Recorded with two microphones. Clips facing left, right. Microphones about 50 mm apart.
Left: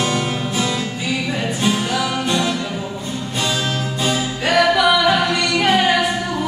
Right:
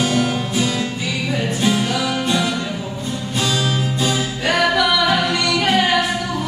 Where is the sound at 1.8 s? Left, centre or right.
Centre.